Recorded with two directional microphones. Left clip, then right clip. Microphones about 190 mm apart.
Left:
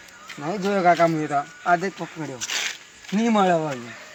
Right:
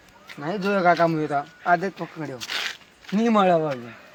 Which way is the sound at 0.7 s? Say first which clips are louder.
Left 1 dB; centre (ahead or behind).